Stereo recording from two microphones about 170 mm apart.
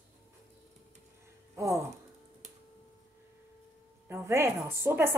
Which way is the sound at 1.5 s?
20° right (ahead or behind).